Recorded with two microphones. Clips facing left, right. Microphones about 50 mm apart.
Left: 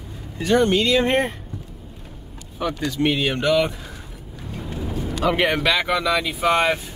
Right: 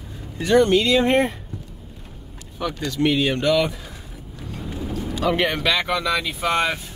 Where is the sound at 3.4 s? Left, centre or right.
Centre.